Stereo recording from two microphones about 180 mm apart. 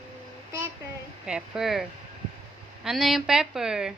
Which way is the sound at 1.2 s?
5° right (ahead or behind).